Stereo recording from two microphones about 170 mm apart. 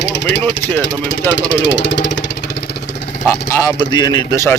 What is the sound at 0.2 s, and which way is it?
Speech, 90° left.